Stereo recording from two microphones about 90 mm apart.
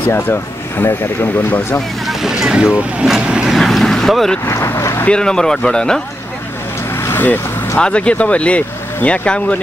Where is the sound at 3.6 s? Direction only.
5° left (ahead or behind).